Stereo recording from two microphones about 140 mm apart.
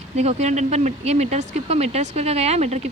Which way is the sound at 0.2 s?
55° right (ahead or behind).